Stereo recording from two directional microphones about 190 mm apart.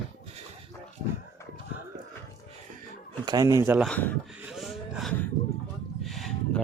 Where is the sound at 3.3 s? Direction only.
20° right (ahead or behind).